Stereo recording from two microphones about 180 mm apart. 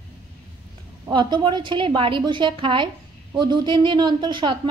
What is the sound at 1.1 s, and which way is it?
A woman's voice, 25° right (ahead or behind).